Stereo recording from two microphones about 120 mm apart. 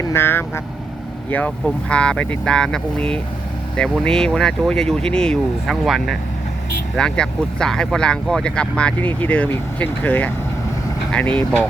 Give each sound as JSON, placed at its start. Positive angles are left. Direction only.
{"t": 0.0, "sound": "speech", "side_deg": 20}